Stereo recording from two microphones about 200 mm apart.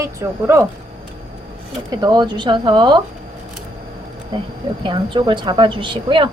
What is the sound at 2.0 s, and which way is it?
A woman's voice, 20° right (ahead or behind).